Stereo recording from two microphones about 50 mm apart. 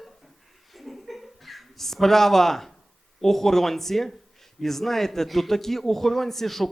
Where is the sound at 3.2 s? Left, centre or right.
Centre.